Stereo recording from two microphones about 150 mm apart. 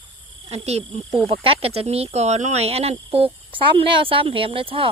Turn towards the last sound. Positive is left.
turn(degrees=-35)  # may be behind; listen again after turning